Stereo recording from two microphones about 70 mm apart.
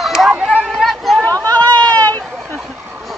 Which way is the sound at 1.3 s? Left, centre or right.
Right.